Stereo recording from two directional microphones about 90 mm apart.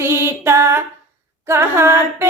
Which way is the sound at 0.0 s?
30° right (ahead or behind).